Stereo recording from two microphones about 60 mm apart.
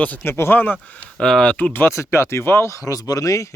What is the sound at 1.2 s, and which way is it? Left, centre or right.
Speech, centre.